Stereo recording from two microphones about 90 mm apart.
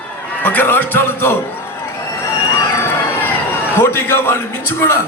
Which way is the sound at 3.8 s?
25° left (ahead or behind).